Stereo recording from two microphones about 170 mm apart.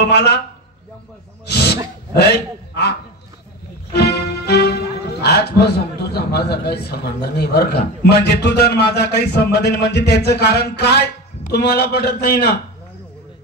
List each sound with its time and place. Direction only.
0.0 s a man's voice: 75° left (ahead or behind)
1.4 s a sound: 75° left (ahead or behind)
2.7 s speech: 75° left (ahead or behind)
3.9 s music: 70° left (ahead or behind)
6.1 s a man's voice: 70° left (ahead or behind)